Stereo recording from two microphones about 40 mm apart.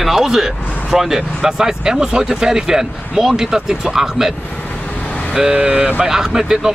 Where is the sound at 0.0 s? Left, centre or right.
Centre.